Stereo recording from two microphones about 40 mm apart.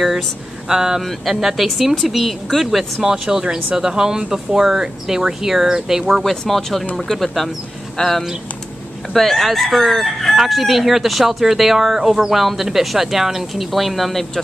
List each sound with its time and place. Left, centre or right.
0.7 s speech: centre
3.0 s speech: centre
6.2 s speech: centre